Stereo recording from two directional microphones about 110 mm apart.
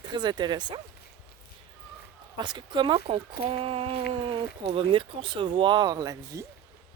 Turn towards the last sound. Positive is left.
turn(degrees=-30)  # may be behind; listen again after turning